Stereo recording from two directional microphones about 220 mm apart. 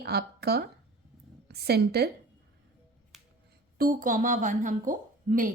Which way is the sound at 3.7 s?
40° right (ahead or behind).